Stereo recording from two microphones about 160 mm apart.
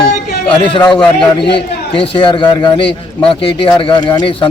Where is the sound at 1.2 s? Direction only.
30° left (ahead or behind).